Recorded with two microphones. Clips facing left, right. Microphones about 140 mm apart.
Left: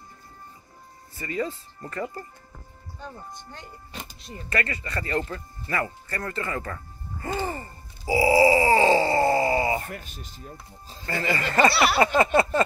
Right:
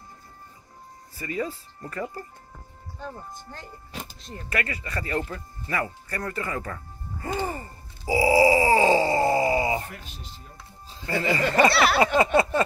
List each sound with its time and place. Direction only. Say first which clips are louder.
1.1 s speech: left 1 dB; 10° right (ahead or behind)
3.0 s speech: right 2 dB; centre (ahead or behind)
4.5 s speech: left 1 dB; 10° right (ahead or behind)
7.2 s music: even; 15° right (ahead or behind)
8.1 s groan: even; 15° right (ahead or behind)
11.1 s speech: right 3 dB; 15° right (ahead or behind)
11.7 s speech: right 1 dB; 5° left (ahead or behind)
12.0 s speech: left 2 dB; 15° right (ahead or behind)